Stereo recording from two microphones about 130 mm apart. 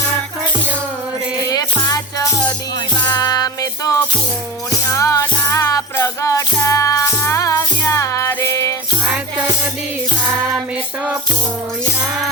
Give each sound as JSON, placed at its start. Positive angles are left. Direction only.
{"t": 1.5, "sound": "music", "side_deg": 30}